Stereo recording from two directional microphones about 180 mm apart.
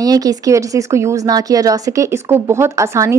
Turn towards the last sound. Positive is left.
turn(degrees=-15)  # may be behind; listen again after turning